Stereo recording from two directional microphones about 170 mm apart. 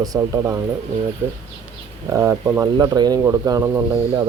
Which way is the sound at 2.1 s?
15° right (ahead or behind).